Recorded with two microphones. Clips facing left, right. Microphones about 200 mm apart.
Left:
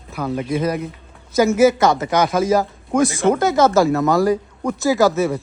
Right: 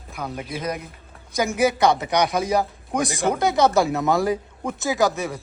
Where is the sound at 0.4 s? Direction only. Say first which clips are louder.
Left 12 dB; 55° left (ahead or behind).